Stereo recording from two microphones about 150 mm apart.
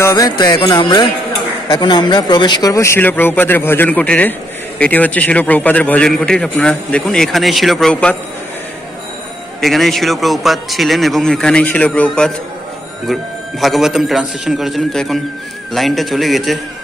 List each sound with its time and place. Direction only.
0.0 s music: 25° left (ahead or behind)
0.6 s speech: 35° left (ahead or behind); by 8.2 s 5° left (ahead or behind)
9.6 s speech: centre (ahead or behind)